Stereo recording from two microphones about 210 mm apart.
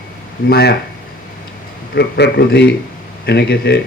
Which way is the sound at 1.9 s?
50° left (ahead or behind).